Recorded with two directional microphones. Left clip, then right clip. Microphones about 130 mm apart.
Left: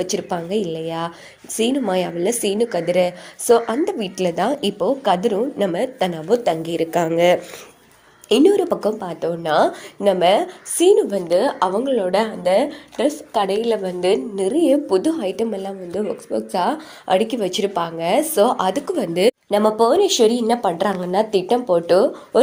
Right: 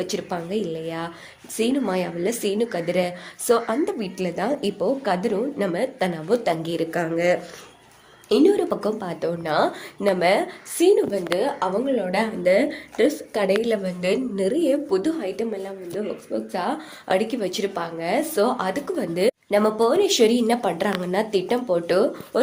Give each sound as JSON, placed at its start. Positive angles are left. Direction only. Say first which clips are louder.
{"t": 0.0, "sound": "a woman's voice", "louder": "left 4 dB", "side_deg": 30}
{"t": 4.2, "sound": "a woman's voice", "louder": "left 6 dB", "side_deg": 45}
{"t": 6.9, "sound": "a woman's voice", "louder": "left 6 dB", "side_deg": 30}
{"t": 9.0, "sound": "speech", "louder": "left 3 dB", "side_deg": 5}
{"t": 9.4, "sound": "a woman's voice", "louder": "left 5 dB", "side_deg": 35}
{"t": 10.0, "sound": "a woman's voice", "louder": "left 4 dB", "side_deg": 25}
{"t": 11.3, "sound": "a woman's voice", "louder": "left 7 dB", "side_deg": 70}
{"t": 12.5, "sound": "a woman's voice", "louder": "left 1 dB", "side_deg": 25}
{"t": 15.9, "sound": "a woman's voice", "louder": "left 5 dB", "side_deg": 75}
{"t": 16.3, "sound": "speech", "louder": "left 6 dB", "side_deg": 55}
{"t": 17.1, "sound": "speech", "louder": "left 4 dB", "side_deg": 35}
{"t": 19.5, "sound": "a woman's voice", "louder": "left 2 dB", "side_deg": 35}
{"t": 20.1, "sound": "a woman's voice", "louder": "left 3 dB", "side_deg": 25}